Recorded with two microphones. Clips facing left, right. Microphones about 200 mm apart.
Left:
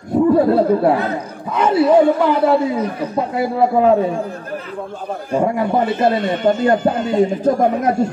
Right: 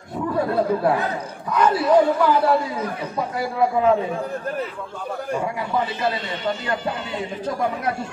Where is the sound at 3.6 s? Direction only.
35° left (ahead or behind).